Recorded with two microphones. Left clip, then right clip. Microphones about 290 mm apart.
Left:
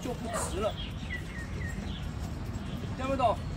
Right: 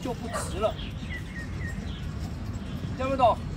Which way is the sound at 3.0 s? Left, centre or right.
Centre.